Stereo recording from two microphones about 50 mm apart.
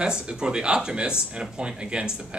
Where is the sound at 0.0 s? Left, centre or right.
Centre.